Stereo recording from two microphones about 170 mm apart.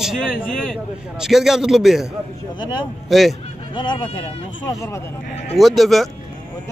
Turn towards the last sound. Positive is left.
turn(degrees=0)  # may be behind; listen again after turning